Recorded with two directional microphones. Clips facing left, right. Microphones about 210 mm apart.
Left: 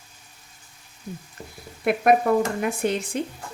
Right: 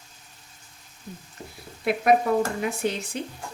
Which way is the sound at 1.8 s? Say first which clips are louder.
Left 2 dB; 55° left (ahead or behind).